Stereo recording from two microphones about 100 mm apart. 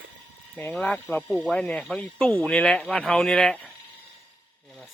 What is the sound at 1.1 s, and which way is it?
Speech, 20° left (ahead or behind).